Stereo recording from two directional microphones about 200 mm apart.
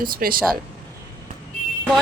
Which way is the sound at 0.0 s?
45° right (ahead or behind).